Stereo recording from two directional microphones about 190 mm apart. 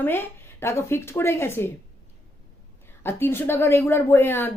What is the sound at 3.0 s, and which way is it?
Speech, 10° left (ahead or behind).